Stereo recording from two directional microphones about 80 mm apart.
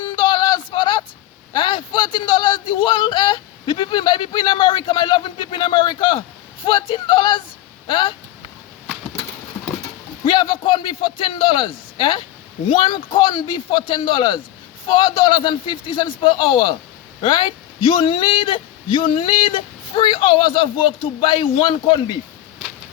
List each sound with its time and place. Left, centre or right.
0.0 s a sound: left
1.5 s speech: left
6.7 s a man's voice: left
7.9 s a man's voice: left
10.2 s a man's voice: left
17.2 s a man's voice: left